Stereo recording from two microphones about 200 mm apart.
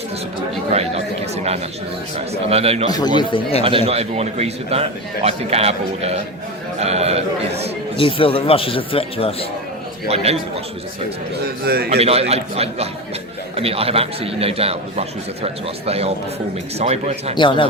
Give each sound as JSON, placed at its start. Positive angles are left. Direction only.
{"t": 0.7, "sound": "chatter", "side_deg": -30}
{"t": 2.1, "sound": "a man's voice", "side_deg": -30}
{"t": 3.2, "sound": "speech", "side_deg": 25}
{"t": 3.6, "sound": "a man's voice", "side_deg": -25}
{"t": 7.9, "sound": "speech", "side_deg": 25}
{"t": 11.4, "sound": "a man's voice", "side_deg": -50}
{"t": 11.9, "sound": "a man's voice", "side_deg": -30}
{"t": 17.3, "sound": "speech", "side_deg": 25}